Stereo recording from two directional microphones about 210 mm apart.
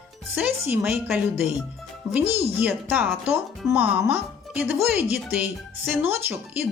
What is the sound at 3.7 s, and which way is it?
Speech, 10° right (ahead or behind).